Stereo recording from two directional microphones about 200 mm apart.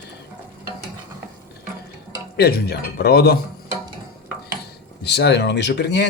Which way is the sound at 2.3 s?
55° left (ahead or behind).